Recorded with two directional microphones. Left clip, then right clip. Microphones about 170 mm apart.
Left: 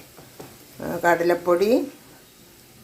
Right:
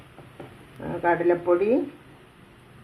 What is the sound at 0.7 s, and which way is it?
Speech, 40° left (ahead or behind).